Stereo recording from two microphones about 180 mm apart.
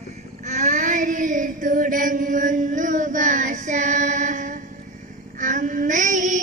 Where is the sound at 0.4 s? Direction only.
40° right (ahead or behind).